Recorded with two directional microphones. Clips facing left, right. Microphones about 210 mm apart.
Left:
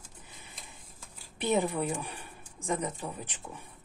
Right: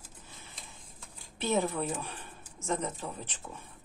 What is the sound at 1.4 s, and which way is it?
Speech, 15° left (ahead or behind).